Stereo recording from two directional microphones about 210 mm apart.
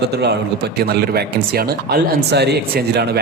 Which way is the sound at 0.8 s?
50° right (ahead or behind).